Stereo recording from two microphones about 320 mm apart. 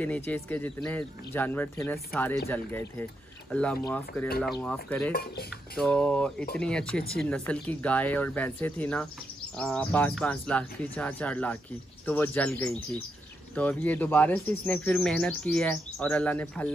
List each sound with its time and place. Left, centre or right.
0.0 s speech: centre